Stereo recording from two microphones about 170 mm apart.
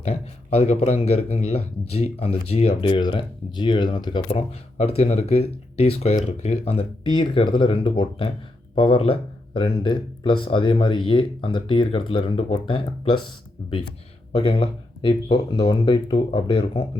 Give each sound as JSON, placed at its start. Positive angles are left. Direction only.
{"t": 0.0, "sound": "speech", "side_deg": 35}
{"t": 14.3, "sound": "speech", "side_deg": 30}